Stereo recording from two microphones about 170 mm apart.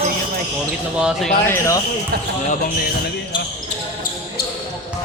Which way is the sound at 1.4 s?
15° left (ahead or behind).